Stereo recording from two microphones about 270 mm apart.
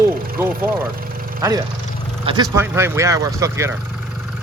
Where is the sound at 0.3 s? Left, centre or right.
Centre.